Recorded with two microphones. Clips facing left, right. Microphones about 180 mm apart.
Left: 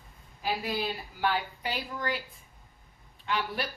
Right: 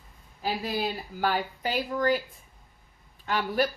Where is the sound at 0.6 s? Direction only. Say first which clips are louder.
Right 2 dB; 40° right (ahead or behind).